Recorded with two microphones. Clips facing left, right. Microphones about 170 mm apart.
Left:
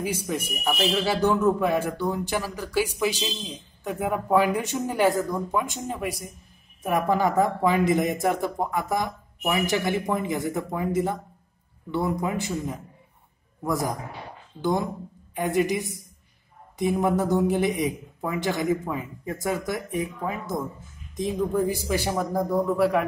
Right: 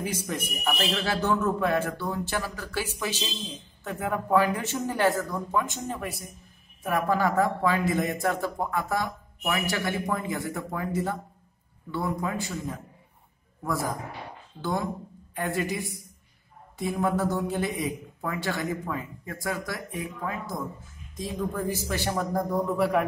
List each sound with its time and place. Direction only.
0.0 s speech: 10° left (ahead or behind)